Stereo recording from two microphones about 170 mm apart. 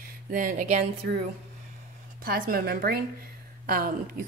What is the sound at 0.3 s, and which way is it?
Speech, 50° right (ahead or behind).